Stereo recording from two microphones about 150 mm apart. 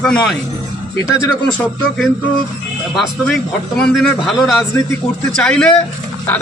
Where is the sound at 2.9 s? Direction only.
Centre (ahead or behind).